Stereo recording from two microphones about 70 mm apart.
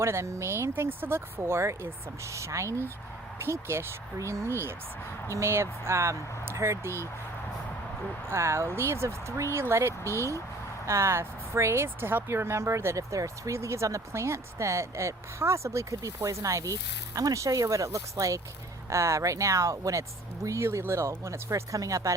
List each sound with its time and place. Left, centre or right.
0.0 s speech: right
8.3 s speech: right
21.5 s speech: right